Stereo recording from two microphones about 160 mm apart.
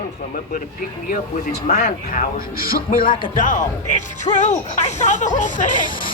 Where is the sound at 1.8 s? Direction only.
45° left (ahead or behind).